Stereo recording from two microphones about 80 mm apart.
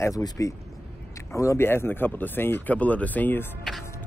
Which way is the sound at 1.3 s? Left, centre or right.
Left.